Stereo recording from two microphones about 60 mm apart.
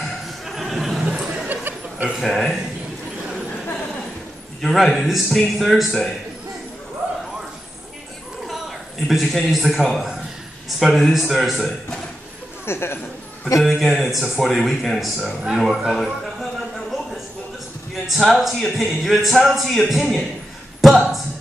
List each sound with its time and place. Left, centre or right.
0.0 s chuckle: centre
1.0 s a sound: centre
1.5 s a sound: right
2.2 s speech: centre
4.6 s speech: centre
8.5 s a man's voice: centre
12.6 s speech: left
13.6 s speech: centre
18.4 s speech: centre